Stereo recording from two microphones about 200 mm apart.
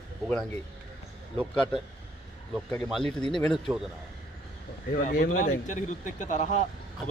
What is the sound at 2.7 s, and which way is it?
Speech, 5° left (ahead or behind).